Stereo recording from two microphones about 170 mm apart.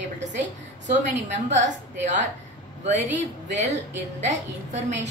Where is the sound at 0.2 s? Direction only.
45° right (ahead or behind).